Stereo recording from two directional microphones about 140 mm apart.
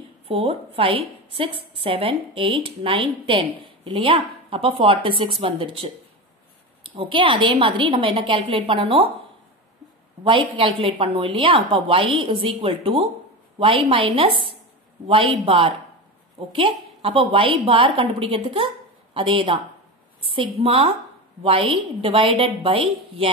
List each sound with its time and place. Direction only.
0.3 s a woman's voice: 40° right (ahead or behind)
10.2 s a woman's voice: 35° right (ahead or behind)
21.4 s a woman's voice: 40° right (ahead or behind)